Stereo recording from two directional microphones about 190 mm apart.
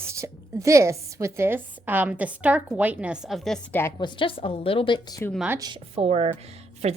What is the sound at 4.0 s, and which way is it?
A woman's voice, 25° left (ahead or behind).